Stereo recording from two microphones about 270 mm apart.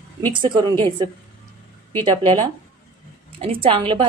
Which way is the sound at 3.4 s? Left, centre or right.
Centre.